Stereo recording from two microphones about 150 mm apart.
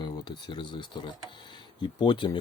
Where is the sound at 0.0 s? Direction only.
30° left (ahead or behind).